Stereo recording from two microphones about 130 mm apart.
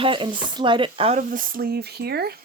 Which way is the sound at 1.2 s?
90° right.